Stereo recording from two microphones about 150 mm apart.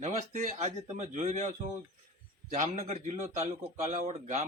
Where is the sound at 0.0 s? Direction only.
50° right (ahead or behind).